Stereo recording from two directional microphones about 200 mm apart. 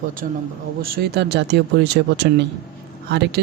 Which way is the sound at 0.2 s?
45° right (ahead or behind).